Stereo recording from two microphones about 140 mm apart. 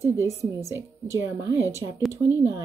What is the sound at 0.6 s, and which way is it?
Speech, 20° right (ahead or behind).